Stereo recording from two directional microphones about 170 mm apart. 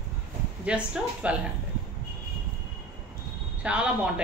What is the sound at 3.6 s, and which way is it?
Speech, 5° right (ahead or behind).